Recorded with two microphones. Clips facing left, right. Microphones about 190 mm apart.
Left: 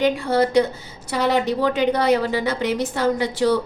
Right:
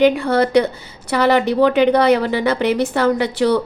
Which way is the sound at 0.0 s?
65° right (ahead or behind).